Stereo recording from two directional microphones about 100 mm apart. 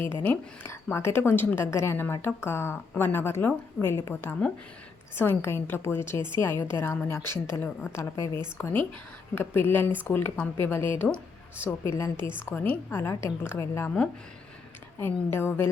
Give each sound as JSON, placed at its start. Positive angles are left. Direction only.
{"t": 0.0, "sound": "a woman's voice", "side_deg": 25}
{"t": 14.9, "sound": "a woman's voice", "side_deg": 20}